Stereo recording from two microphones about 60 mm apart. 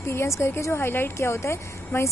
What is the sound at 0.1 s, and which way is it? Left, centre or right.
A woman's voice, left.